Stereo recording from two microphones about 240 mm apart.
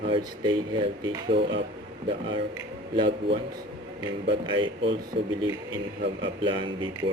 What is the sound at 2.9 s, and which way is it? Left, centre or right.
Speech, right.